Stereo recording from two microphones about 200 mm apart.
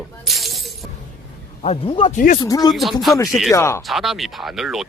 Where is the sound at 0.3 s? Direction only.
Centre (ahead or behind).